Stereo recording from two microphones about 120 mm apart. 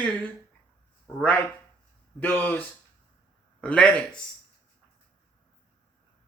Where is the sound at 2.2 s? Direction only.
15° left (ahead or behind).